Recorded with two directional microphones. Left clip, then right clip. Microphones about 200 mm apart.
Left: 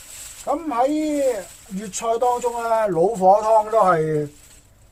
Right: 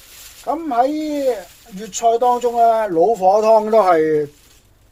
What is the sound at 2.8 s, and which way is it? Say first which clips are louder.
Speech: right 3 dB; 30° right (ahead or behind).